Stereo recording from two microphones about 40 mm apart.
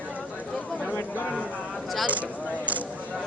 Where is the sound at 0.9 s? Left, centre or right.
Left.